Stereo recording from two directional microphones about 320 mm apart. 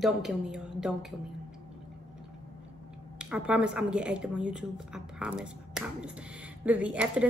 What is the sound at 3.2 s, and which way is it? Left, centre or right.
Speech, centre.